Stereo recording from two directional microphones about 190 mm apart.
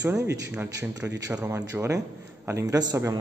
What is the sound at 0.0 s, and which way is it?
A man's voice, 15° right (ahead or behind).